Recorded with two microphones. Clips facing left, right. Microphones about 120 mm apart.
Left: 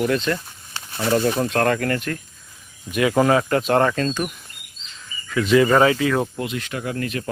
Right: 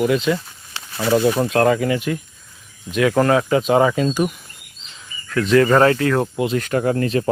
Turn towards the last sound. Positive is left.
turn(degrees=-30)  # may be behind; listen again after turning